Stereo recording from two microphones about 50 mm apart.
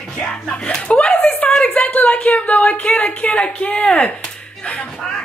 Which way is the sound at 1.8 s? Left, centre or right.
Left.